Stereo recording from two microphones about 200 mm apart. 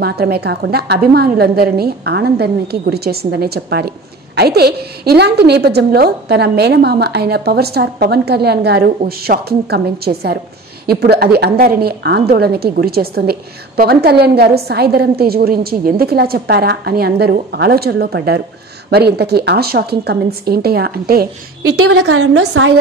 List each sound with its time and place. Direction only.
0.0 s a woman's voice: 50° right (ahead or behind)
21.8 s a woman's voice: 75° right (ahead or behind); by 22.7 s 90° right